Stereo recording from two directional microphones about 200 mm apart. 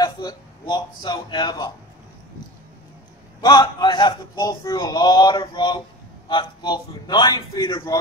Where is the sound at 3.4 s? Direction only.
25° left (ahead or behind).